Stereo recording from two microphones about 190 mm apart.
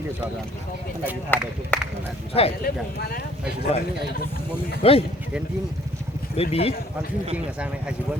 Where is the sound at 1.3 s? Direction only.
10° left (ahead or behind).